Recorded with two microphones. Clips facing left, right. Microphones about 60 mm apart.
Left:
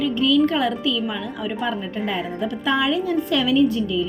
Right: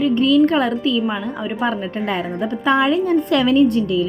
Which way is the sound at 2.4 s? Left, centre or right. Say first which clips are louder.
Right 5 dB; right.